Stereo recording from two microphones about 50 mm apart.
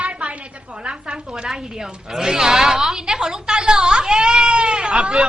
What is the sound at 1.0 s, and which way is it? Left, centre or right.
A woman's voice, centre.